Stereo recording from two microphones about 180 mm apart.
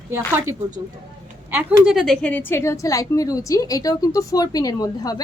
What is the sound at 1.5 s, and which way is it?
A woman's voice, 5° right (ahead or behind).